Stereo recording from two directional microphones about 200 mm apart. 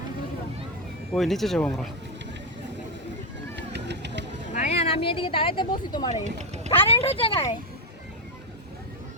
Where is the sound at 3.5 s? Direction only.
60° right (ahead or behind).